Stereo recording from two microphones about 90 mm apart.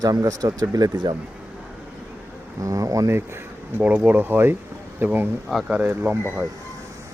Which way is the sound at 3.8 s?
15° right (ahead or behind).